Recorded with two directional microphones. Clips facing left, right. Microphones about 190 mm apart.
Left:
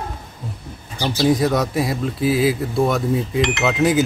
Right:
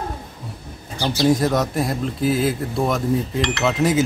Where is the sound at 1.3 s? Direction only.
Centre (ahead or behind).